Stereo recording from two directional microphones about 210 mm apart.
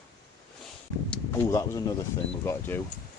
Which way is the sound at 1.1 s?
15° left (ahead or behind).